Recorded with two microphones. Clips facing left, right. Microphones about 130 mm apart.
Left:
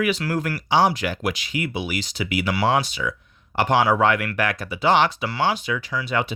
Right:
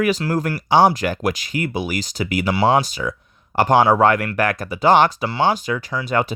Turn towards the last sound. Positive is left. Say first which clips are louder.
# right 4 dB
turn(degrees=-45)  # may be behind; listen again after turning